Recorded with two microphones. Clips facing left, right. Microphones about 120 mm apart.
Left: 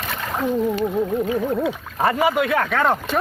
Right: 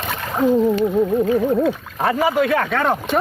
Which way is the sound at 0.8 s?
5° right (ahead or behind).